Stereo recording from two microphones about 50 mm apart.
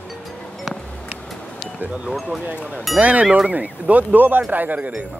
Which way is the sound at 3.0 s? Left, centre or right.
Right.